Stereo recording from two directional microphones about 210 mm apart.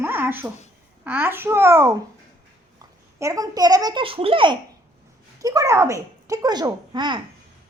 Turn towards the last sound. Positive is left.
turn(degrees=-20)  # may be behind; listen again after turning